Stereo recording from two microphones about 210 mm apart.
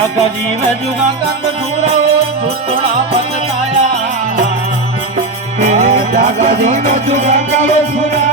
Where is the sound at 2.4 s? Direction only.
25° right (ahead or behind).